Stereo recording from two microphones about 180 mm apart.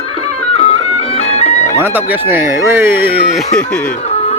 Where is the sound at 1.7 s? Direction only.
10° right (ahead or behind).